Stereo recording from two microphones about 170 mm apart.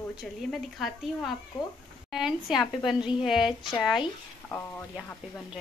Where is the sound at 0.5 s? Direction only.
Centre (ahead or behind).